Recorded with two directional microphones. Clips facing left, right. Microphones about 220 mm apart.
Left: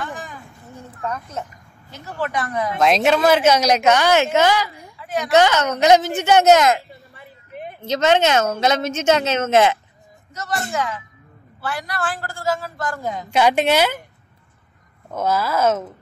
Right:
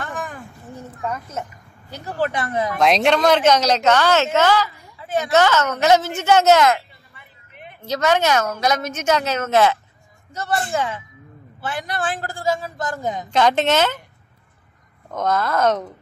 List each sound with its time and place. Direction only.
0.0 s a sound: 55° right (ahead or behind)
1.0 s a child's voice: 10° right (ahead or behind)
1.9 s speech: 35° right (ahead or behind)
2.8 s a woman's voice: centre (ahead or behind); by 6.8 s 20° left (ahead or behind)
7.2 s a sound: 40° left (ahead or behind)
7.8 s a woman's voice: 20° left (ahead or behind)
10.3 s a man's voice: 30° right (ahead or behind)
13.3 s a woman's voice: 10° left (ahead or behind)
15.1 s a woman's voice: 5° left (ahead or behind)